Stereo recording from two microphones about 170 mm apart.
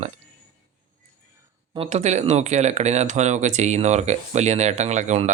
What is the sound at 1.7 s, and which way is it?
Speech, 35° right (ahead or behind).